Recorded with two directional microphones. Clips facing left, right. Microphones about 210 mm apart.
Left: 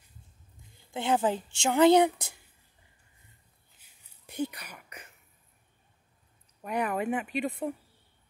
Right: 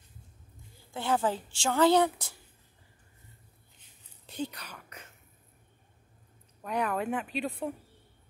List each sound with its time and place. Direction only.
0.9 s a woman's voice: 20° left (ahead or behind)
3.8 s a sound: 10° left (ahead or behind)
6.6 s speech: 10° left (ahead or behind)